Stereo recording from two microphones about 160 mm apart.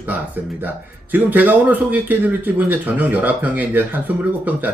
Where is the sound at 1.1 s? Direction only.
10° right (ahead or behind).